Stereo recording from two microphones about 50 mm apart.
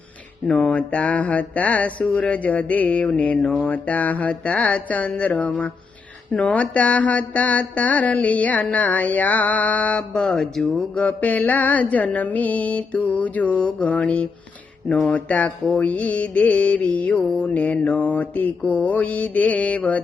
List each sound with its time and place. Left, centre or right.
0.4 s speech: centre
0.7 s mantra: left
10.1 s speech: centre
10.8 s mantra: left